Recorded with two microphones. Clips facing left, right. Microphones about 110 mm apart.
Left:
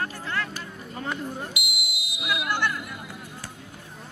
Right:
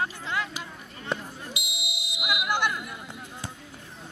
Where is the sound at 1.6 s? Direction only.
25° right (ahead or behind).